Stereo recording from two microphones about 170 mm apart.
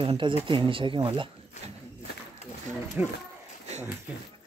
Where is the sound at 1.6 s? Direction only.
40° left (ahead or behind).